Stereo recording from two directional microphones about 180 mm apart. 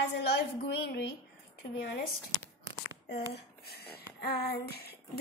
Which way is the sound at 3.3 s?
60° left (ahead or behind).